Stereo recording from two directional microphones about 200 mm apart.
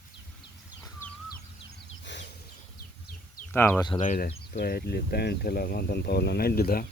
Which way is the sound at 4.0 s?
40° left (ahead or behind).